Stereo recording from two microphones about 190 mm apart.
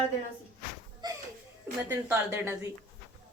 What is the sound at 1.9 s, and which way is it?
Speech, 10° right (ahead or behind).